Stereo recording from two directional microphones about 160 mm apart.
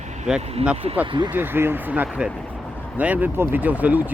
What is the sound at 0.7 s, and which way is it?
Speech, 35° right (ahead or behind).